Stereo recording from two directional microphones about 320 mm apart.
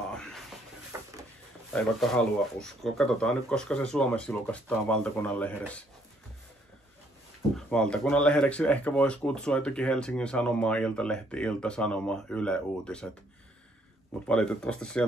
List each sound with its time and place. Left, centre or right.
0.1 s a sound: centre
1.7 s speech: centre
7.5 s speech: centre
14.2 s speech: centre